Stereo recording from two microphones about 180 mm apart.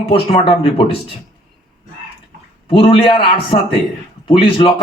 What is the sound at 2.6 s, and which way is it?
Speech, 30° left (ahead or behind).